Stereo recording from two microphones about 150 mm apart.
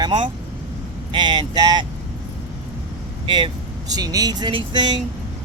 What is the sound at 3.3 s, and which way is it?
Speech, 30° right (ahead or behind).